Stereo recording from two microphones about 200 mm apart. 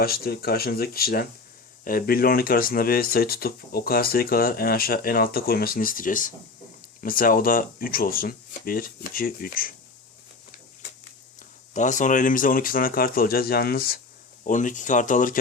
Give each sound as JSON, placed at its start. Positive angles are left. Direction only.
{"t": 0.0, "sound": "speech", "side_deg": 50}
{"t": 11.7, "sound": "speech", "side_deg": 40}